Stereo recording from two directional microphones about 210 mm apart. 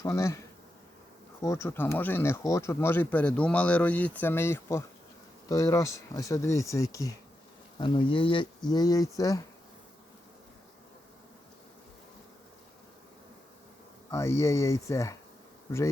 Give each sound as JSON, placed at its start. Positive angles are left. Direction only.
{"t": 0.0, "sound": "speech", "side_deg": 15}
{"t": 14.1, "sound": "speech", "side_deg": 15}